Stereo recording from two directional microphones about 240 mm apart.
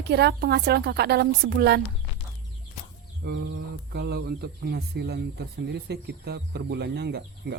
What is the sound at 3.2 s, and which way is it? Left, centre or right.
Speech, right.